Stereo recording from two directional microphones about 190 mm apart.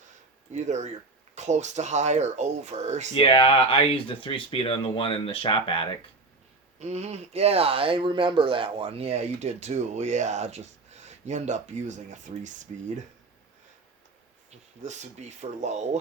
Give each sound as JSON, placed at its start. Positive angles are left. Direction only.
{"t": 0.5, "sound": "speech", "side_deg": -35}
{"t": 3.2, "sound": "speech", "side_deg": 30}
{"t": 6.7, "sound": "speech", "side_deg": -35}
{"t": 14.8, "sound": "speech", "side_deg": -35}